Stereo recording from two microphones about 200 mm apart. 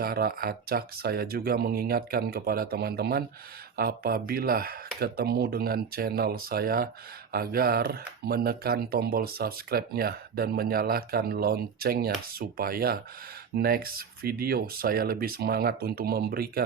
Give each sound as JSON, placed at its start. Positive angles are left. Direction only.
{"t": 0.0, "sound": "speech", "side_deg": -50}